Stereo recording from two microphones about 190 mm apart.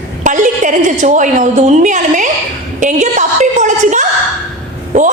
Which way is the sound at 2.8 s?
40° right (ahead or behind).